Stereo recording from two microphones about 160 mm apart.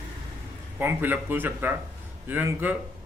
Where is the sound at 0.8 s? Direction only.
15° right (ahead or behind).